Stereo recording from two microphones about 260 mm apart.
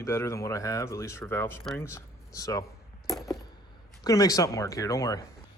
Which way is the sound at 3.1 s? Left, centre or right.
Centre.